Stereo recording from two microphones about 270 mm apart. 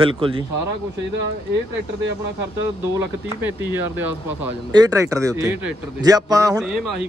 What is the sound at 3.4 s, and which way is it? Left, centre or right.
Speech, centre.